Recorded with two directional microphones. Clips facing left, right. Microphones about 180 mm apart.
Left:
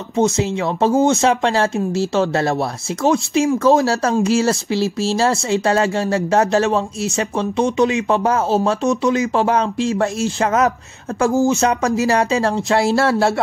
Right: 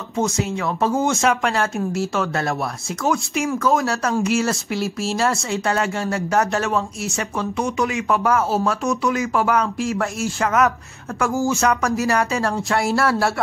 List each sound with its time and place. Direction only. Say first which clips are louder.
0.2 s speech: left 5 dB; 25° left (ahead or behind)
3.7 s speech: left 4 dB; 35° left (ahead or behind)